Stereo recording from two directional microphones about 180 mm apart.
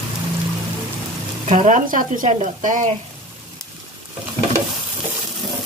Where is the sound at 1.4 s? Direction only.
40° right (ahead or behind).